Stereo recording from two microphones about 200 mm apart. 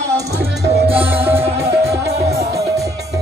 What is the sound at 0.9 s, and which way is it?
Music, 10° right (ahead or behind).